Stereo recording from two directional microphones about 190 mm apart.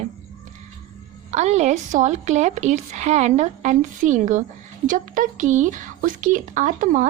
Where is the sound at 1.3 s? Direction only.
35° right (ahead or behind).